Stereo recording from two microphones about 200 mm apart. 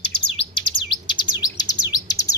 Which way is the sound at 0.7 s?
25° left (ahead or behind).